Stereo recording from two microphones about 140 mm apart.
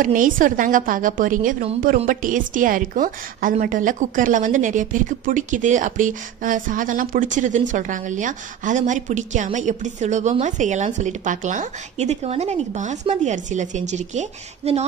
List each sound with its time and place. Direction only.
0.0 s a woman's voice: 70° right (ahead or behind); by 14.9 s 50° right (ahead or behind)